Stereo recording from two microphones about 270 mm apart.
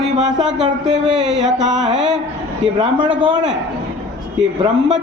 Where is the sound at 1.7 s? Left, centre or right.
Centre.